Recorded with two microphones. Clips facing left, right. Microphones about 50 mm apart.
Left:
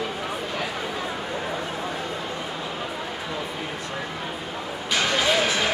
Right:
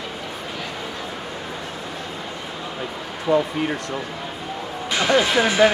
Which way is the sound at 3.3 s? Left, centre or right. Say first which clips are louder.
Right 16 dB; right.